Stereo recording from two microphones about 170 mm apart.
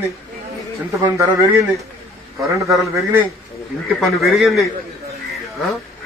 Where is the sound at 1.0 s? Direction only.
15° right (ahead or behind).